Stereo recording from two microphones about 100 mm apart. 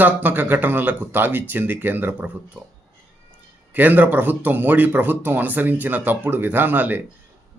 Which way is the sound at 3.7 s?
20° right (ahead or behind).